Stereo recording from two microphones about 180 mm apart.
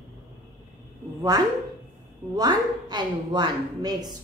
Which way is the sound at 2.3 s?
25° right (ahead or behind).